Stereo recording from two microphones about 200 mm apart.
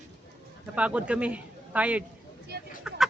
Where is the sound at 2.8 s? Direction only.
5° right (ahead or behind).